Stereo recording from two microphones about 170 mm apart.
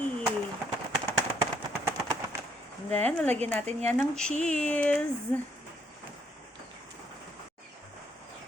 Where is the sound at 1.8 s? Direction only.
15° right (ahead or behind).